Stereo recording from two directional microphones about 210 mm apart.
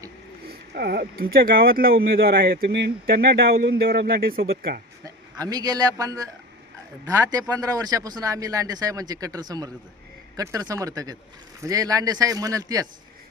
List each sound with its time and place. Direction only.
0.4 s speech: 50° right (ahead or behind)
5.0 s a man's voice: 20° right (ahead or behind)
7.3 s speech: 15° right (ahead or behind)